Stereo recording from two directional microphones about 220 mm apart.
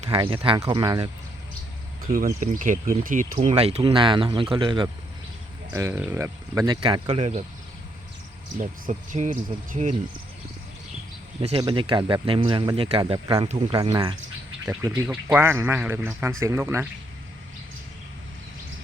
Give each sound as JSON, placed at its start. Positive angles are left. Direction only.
{"t": 0.0, "sound": "speech", "side_deg": -25}
{"t": 2.1, "sound": "speech", "side_deg": -35}
{"t": 5.7, "sound": "speech", "side_deg": -10}
{"t": 8.5, "sound": "speech", "side_deg": -35}
{"t": 11.3, "sound": "speech", "side_deg": -25}